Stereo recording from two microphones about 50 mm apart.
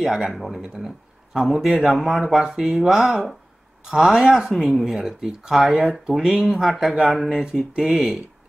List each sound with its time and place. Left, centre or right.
0.0 s speech: centre
1.4 s a man's voice: centre